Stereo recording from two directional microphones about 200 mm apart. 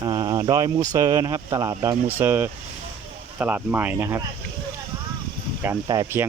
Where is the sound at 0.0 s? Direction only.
20° right (ahead or behind).